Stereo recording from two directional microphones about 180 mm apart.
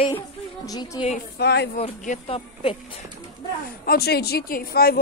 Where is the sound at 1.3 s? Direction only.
65° left (ahead or behind).